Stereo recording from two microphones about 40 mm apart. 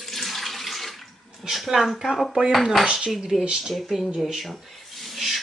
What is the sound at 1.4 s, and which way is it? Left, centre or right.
Speech, centre.